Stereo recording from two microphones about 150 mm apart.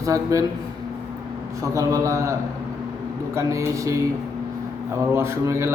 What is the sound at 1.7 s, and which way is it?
Speech, 20° right (ahead or behind).